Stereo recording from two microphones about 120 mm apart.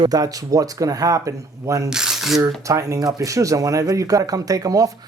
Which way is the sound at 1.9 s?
5° right (ahead or behind).